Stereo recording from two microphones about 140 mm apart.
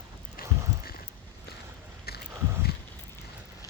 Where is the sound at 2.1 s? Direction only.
90° left.